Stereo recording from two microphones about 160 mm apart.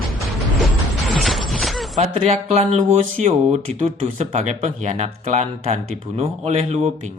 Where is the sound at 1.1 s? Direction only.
Centre (ahead or behind).